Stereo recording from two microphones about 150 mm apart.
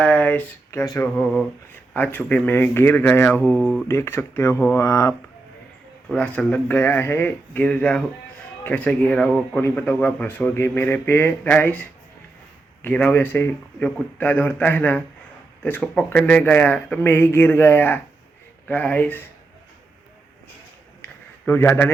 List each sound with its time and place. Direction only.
0.0 s speech: 10° left (ahead or behind)
1.1 s speech: 5° left (ahead or behind)
3.8 s speech: 15° left (ahead or behind)
6.1 s speech: 10° left (ahead or behind)
21.0 s a sound: 10° left (ahead or behind)